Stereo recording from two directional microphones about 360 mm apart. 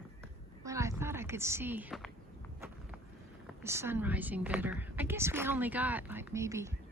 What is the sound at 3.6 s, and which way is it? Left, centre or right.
A woman's voice, centre.